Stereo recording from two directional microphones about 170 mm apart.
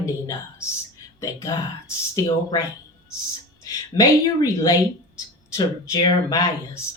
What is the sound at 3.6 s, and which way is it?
Speech, 20° left (ahead or behind).